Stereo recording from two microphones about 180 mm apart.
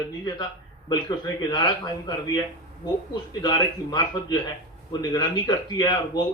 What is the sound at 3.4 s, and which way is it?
A man's voice, 20° left (ahead or behind).